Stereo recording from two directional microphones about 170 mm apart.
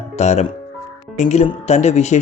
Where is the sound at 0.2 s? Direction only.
40° left (ahead or behind).